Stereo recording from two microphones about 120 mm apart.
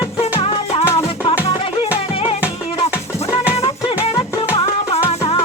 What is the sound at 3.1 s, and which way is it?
Music, 25° left (ahead or behind).